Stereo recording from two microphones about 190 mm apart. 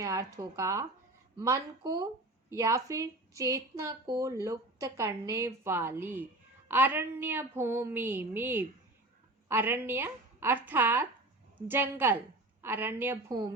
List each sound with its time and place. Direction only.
0.0 s a woman's voice: 15° right (ahead or behind)